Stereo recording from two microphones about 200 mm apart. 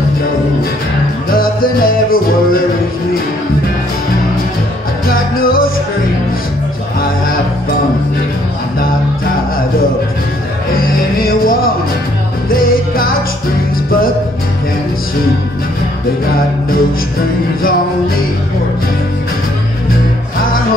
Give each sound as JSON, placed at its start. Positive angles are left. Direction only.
{"t": 1.3, "sound": "music", "side_deg": 45}
{"t": 10.8, "sound": "music", "side_deg": 45}